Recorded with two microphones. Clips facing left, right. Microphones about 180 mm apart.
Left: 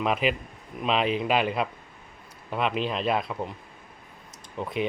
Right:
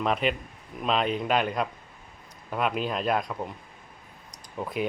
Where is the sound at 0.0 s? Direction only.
5° left (ahead or behind).